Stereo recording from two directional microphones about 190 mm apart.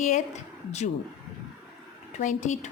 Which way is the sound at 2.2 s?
40° left (ahead or behind).